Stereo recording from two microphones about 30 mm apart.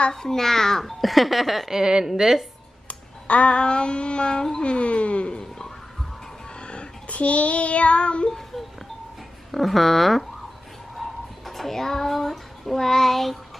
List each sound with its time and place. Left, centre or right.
0.1 s a child's voice: centre
1.0 s speech: centre
1.7 s a woman's voice: right
2.9 s a sound: left
4.6 s child singing: left
6.6 s a sound: left
7.1 s child singing: left
9.5 s speech: centre
11.0 s child singing: centre
12.7 s a child's voice: centre